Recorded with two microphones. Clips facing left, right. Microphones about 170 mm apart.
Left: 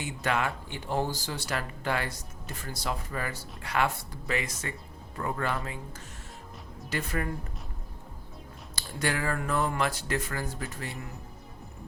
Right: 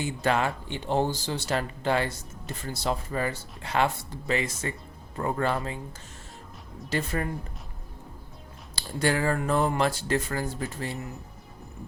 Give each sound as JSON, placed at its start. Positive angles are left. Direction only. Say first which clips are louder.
{"t": 0.0, "sound": "speech", "louder": "right 4 dB", "side_deg": -30}
{"t": 6.9, "sound": "speech", "louder": "right 3 dB", "side_deg": -30}
{"t": 8.7, "sound": "speech", "louder": "right 5 dB", "side_deg": -30}